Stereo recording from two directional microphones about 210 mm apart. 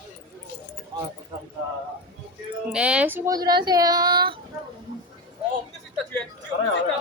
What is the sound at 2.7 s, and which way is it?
Speech, 5° right (ahead or behind).